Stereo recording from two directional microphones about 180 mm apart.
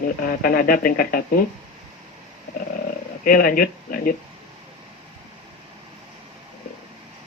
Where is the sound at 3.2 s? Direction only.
55° left (ahead or behind).